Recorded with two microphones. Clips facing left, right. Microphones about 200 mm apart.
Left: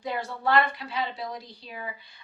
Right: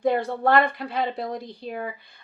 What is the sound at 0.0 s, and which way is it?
A woman's voice, 55° right (ahead or behind).